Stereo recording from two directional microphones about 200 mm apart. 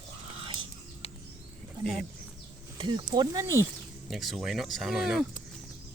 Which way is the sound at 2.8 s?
25° right (ahead or behind).